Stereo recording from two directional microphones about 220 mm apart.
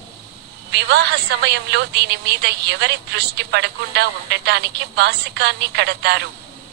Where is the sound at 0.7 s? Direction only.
50° right (ahead or behind).